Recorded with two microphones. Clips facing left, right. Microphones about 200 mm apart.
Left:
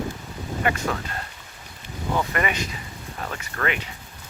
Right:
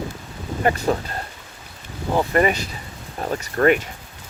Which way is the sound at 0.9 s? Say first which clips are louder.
Right 7 dB; 35° right (ahead or behind).